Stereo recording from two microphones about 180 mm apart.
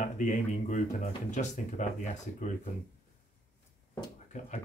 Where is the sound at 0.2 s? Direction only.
45° left (ahead or behind).